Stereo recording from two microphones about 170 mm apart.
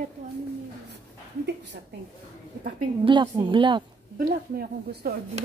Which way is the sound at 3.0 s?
30° right (ahead or behind).